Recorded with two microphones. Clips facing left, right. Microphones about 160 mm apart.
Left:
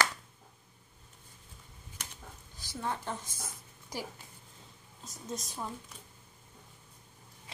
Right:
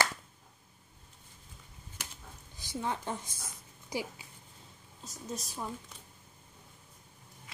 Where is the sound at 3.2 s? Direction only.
50° left (ahead or behind).